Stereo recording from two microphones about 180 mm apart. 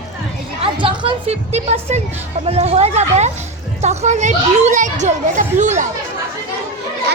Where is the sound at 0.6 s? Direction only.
30° right (ahead or behind).